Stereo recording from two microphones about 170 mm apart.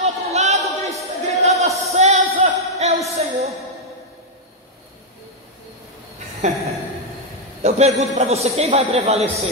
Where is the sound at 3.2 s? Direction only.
40° right (ahead or behind).